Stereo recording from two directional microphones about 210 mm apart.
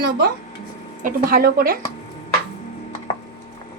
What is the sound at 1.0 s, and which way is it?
Speech, 45° right (ahead or behind).